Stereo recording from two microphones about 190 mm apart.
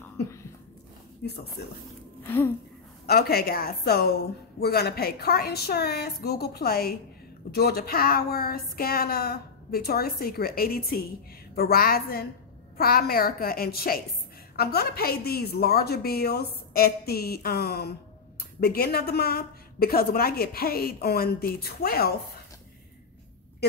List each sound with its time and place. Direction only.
1.6 s a woman's voice: 60° left (ahead or behind)
2.2 s speech: 10° left (ahead or behind)
3.1 s a woman's voice: 55° left (ahead or behind)